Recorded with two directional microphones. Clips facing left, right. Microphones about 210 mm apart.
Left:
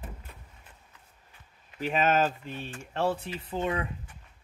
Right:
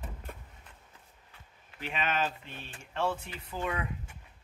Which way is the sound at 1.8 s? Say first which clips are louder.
Left 7 dB; 40° left (ahead or behind).